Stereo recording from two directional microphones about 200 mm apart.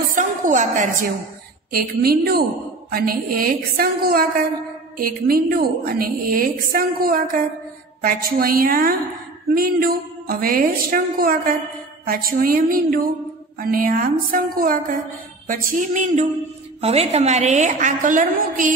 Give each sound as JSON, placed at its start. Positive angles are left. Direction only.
{"t": 0.1, "sound": "a woman's voice", "side_deg": -40}